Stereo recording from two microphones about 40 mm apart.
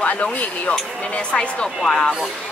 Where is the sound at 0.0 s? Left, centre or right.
Left.